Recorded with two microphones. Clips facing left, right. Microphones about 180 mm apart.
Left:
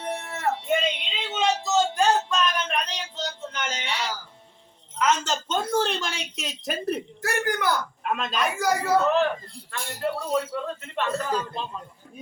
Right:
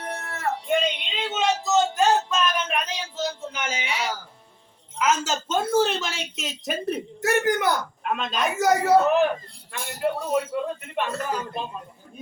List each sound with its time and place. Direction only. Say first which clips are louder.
0.0 s music: left 2 dB; 20° left (ahead or behind)
1.3 s a sound: right 1 dB; centre (ahead or behind)
4.9 s a woman's voice: even; 5° right (ahead or behind)
7.2 s speech: right 5 dB; 20° right (ahead or behind)
8.0 s speech: even; centre (ahead or behind)
8.5 s speech: right 5 dB; 20° right (ahead or behind)